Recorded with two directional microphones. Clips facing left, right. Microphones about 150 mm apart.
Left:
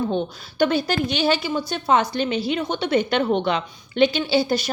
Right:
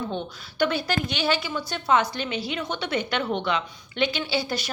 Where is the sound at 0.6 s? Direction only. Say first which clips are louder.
Left 4 dB; 35° left (ahead or behind).